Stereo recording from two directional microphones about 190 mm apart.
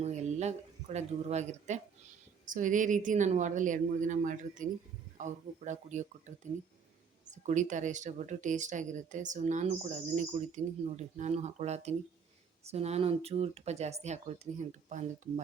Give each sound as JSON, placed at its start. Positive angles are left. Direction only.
{"t": 0.0, "sound": "speech", "side_deg": -35}